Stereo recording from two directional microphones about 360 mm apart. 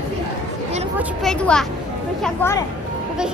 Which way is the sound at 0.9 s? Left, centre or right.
Centre.